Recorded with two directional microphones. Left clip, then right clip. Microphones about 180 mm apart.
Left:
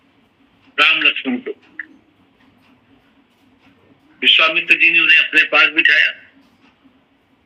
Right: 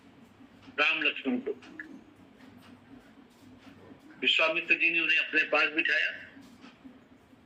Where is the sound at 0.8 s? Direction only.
45° left (ahead or behind).